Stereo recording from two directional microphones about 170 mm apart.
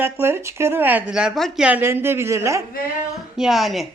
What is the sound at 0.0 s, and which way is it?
Speech, 15° right (ahead or behind).